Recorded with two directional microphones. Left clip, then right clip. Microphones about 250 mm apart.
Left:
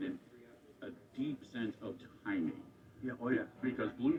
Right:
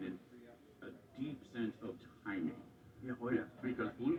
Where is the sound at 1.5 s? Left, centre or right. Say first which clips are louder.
Left 1 dB; left.